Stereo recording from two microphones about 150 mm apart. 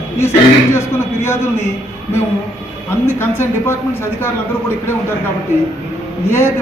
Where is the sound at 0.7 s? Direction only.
15° left (ahead or behind).